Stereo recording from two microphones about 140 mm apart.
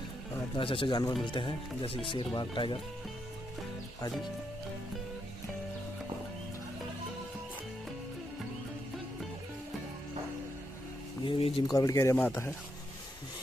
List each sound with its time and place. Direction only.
0.6 s speech: 40° left (ahead or behind)
11.2 s speech: 40° left (ahead or behind)
11.7 s speech: 25° left (ahead or behind)